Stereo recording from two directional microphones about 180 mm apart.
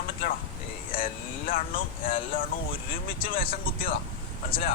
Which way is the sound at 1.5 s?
50° left (ahead or behind).